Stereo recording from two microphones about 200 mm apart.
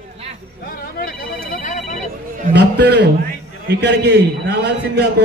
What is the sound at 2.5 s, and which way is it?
Music, 55° right (ahead or behind).